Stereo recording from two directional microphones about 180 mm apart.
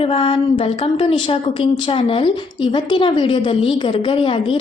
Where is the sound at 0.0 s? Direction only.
30° left (ahead or behind).